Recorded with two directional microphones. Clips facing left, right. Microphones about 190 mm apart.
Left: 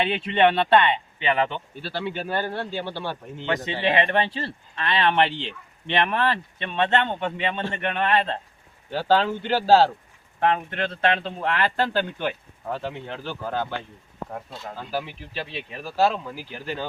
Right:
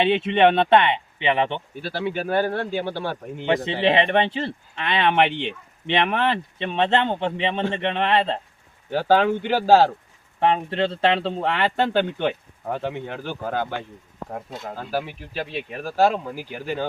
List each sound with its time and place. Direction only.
0.0 s speech: 25° right (ahead or behind)
1.8 s speech: 10° right (ahead or behind)
3.5 s speech: 25° right (ahead or behind)
8.9 s speech: 10° right (ahead or behind)
10.4 s speech: 30° right (ahead or behind)
14.3 s speech: 25° right (ahead or behind)
14.9 s speech: 50° right (ahead or behind)
16.0 s speech: 15° right (ahead or behind)